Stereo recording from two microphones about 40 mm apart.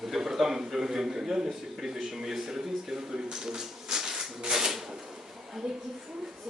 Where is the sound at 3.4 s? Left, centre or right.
Centre.